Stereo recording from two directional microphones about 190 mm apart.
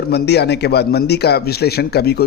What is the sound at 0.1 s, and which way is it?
A man's voice, 60° left (ahead or behind).